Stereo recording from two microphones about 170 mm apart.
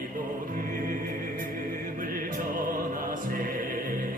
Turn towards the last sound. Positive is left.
turn(degrees=-55)  # may be behind; listen again after turning